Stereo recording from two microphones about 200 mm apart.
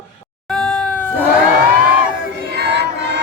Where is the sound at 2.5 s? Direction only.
55° right (ahead or behind).